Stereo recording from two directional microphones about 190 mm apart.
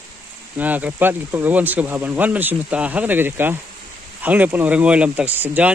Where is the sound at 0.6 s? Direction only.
10° right (ahead or behind).